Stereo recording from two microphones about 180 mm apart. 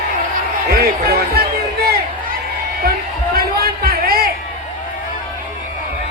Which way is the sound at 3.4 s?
60° right (ahead or behind).